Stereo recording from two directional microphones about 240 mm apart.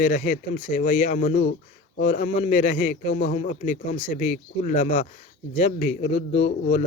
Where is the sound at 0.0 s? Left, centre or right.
Left.